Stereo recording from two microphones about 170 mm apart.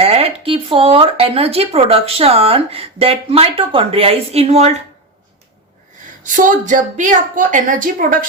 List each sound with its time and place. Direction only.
0.0 s speech: 35° right (ahead or behind)
6.2 s a woman's voice: 50° right (ahead or behind)